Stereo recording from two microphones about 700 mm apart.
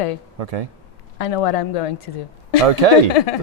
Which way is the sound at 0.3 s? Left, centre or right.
Right.